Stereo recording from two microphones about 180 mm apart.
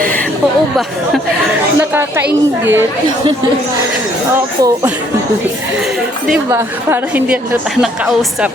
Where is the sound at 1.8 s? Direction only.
10° right (ahead or behind).